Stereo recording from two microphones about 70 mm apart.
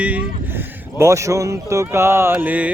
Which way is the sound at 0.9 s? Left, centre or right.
Right.